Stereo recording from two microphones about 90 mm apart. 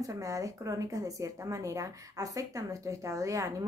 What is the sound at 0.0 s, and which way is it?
Speech, 40° right (ahead or behind).